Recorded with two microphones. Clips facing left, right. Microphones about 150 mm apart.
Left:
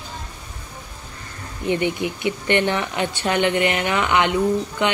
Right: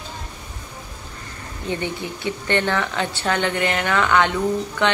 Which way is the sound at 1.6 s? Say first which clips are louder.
Left 5 dB; 15° left (ahead or behind).